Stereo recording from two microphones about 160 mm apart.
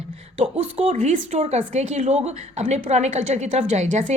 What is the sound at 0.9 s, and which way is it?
A woman's voice, 55° right (ahead or behind).